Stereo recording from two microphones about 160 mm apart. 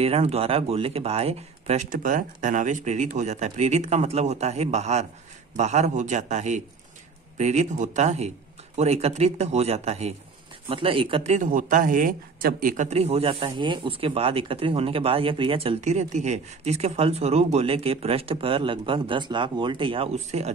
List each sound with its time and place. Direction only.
0.0 s a man's voice: 40° right (ahead or behind)
11.3 s a man's voice: 55° right (ahead or behind)